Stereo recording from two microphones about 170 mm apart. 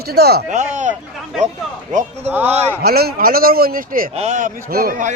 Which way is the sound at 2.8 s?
65° right (ahead or behind).